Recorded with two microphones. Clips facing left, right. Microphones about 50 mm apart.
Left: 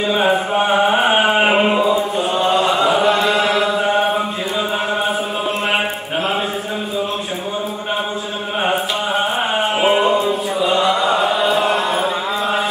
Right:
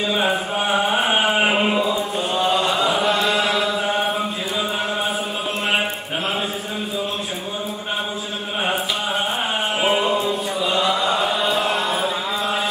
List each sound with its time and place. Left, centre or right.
0.0 s chant: centre
8.6 s chant: centre